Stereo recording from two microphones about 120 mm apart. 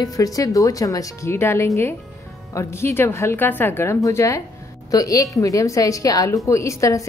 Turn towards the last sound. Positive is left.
turn(degrees=25)  # may be behind; listen again after turning